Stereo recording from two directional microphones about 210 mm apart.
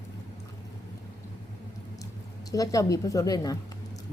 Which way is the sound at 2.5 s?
15° left (ahead or behind).